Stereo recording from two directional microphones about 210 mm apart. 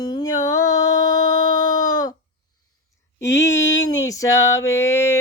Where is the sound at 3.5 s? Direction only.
60° left (ahead or behind).